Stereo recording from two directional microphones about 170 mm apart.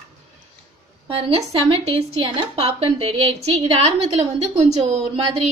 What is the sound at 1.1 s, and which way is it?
A woman's voice, 35° right (ahead or behind).